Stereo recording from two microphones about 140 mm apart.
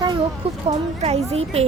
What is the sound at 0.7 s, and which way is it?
Speech, 50° right (ahead or behind).